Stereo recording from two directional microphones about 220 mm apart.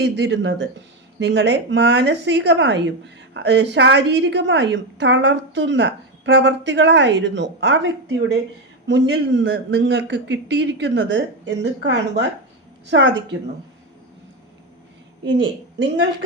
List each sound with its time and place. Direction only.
0.0 s a woman's voice: 50° right (ahead or behind)